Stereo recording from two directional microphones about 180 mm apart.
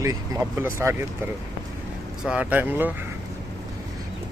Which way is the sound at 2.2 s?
5° right (ahead or behind).